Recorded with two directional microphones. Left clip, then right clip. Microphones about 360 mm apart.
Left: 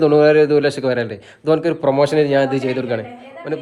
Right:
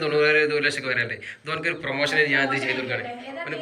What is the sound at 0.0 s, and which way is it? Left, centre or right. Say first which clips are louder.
A man's voice: left 8 dB; centre.